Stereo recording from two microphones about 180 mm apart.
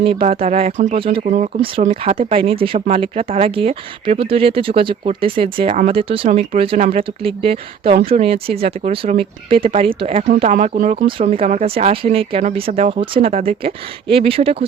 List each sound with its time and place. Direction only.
0.0 s speech: 35° right (ahead or behind)
1.2 s speech: 40° right (ahead or behind)
1.6 s speech: 30° right (ahead or behind)
6.7 s speech: 45° right (ahead or behind)
7.4 s speech: 35° right (ahead or behind)
10.5 s speech: 45° right (ahead or behind)